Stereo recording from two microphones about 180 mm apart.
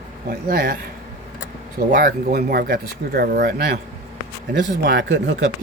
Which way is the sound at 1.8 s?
50° right (ahead or behind).